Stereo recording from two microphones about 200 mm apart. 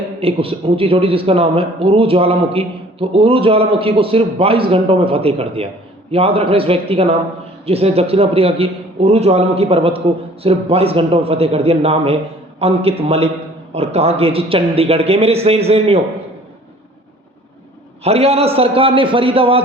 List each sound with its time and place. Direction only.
0.2 s a man's voice: 30° right (ahead or behind)
18.0 s a man's voice: 30° right (ahead or behind)